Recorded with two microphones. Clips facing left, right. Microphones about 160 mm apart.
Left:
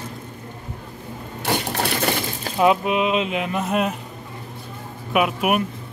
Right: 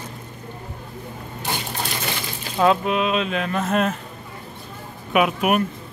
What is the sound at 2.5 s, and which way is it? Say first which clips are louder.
Speech: left 1 dB; 15° left (ahead or behind).